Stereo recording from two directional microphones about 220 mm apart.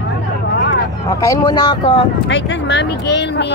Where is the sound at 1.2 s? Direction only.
15° left (ahead or behind).